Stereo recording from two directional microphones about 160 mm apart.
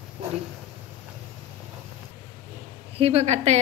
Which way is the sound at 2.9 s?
40° right (ahead or behind).